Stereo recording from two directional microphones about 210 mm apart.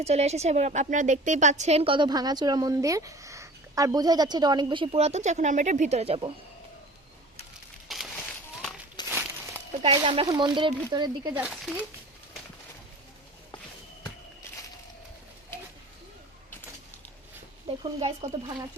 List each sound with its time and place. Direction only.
0.0 s a woman's voice: 30° right (ahead or behind)
7.9 s a sound: centre (ahead or behind)
9.0 s a sound: 20° left (ahead or behind)
9.8 s a woman's voice: 25° right (ahead or behind)
11.3 s speech: 5° right (ahead or behind)
18.0 s speech: 30° right (ahead or behind)